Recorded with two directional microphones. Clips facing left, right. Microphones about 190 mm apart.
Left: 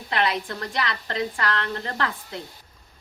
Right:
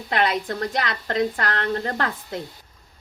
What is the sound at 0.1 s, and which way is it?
A woman's voice, 45° right (ahead or behind).